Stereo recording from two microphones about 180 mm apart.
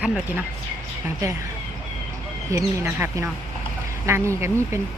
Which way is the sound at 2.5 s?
15° right (ahead or behind).